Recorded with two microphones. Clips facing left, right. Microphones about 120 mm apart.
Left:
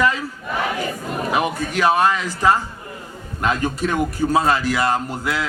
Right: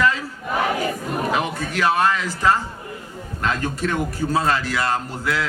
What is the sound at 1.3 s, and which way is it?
A man's voice, 15° left (ahead or behind).